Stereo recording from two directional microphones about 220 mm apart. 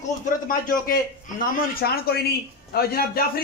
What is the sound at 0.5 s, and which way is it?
A man's voice, 40° left (ahead or behind).